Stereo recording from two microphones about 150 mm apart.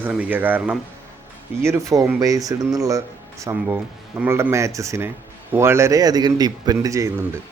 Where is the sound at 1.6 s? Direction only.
20° right (ahead or behind).